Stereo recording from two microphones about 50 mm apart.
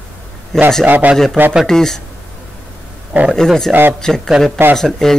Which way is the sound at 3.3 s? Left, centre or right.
Centre.